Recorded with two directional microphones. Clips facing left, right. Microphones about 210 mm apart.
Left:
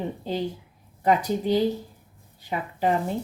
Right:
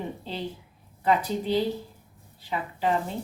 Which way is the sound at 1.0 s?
40° left (ahead or behind).